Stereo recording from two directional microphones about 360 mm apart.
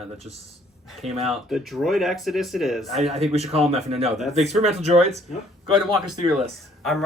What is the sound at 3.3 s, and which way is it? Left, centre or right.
Speech, centre.